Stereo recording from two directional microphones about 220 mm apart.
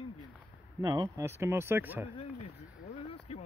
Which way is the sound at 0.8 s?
15° right (ahead or behind).